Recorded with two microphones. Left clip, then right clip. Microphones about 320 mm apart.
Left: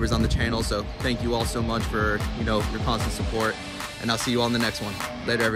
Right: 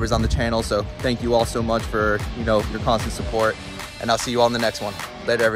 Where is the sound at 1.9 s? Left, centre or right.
Right.